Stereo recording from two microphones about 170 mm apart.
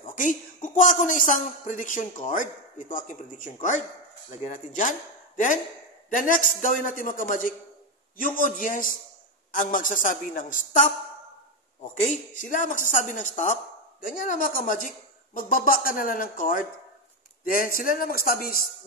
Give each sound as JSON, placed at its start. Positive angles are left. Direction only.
{"t": 0.0, "sound": "a woman's voice", "side_deg": 50}
{"t": 12.4, "sound": "a woman's voice", "side_deg": 50}